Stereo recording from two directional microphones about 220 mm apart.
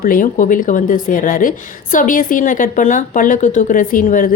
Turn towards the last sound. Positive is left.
turn(degrees=40)  # may be behind; listen again after turning